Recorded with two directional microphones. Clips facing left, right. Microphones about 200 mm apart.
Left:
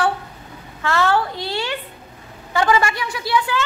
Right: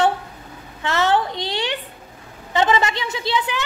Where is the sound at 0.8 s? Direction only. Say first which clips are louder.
Even; 20° right (ahead or behind).